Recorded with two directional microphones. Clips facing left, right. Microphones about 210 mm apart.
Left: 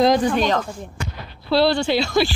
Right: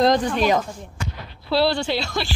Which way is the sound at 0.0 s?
Centre (ahead or behind).